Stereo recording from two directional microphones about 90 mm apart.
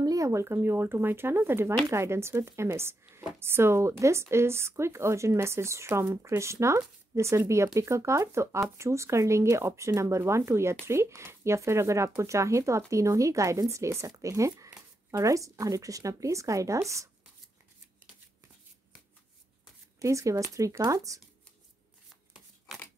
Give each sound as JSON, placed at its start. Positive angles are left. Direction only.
{"t": 0.0, "sound": "a woman's voice", "side_deg": -40}
{"t": 20.0, "sound": "a woman's voice", "side_deg": -35}
{"t": 22.7, "sound": "a sound", "side_deg": -5}